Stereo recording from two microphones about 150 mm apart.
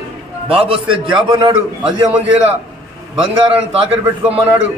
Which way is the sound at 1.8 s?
10° right (ahead or behind).